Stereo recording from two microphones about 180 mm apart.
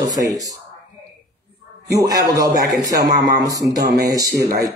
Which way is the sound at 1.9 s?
20° right (ahead or behind).